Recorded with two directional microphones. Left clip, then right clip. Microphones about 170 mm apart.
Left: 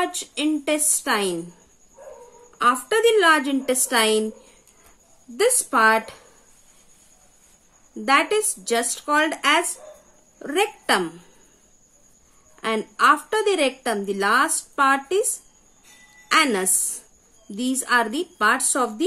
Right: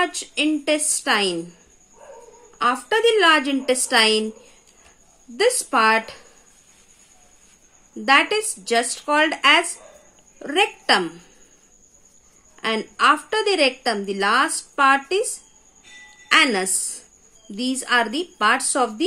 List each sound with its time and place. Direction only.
0.0 s a woman's voice: 20° left (ahead or behind)
2.6 s a woman's voice: 30° left (ahead or behind)
5.4 s a woman's voice: 30° left (ahead or behind)
8.0 s a woman's voice: 20° left (ahead or behind)
12.5 s a woman's voice: 20° left (ahead or behind)
16.3 s a woman's voice: 20° left (ahead or behind)